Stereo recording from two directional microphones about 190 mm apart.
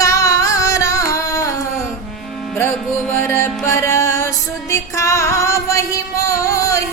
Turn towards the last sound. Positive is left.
turn(degrees=15)  # may be behind; listen again after turning